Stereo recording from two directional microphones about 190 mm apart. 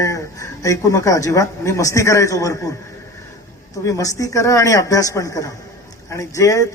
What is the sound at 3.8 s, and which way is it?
A man's voice, 20° left (ahead or behind).